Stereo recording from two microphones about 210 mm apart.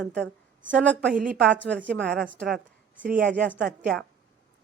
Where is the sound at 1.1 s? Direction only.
40° right (ahead or behind).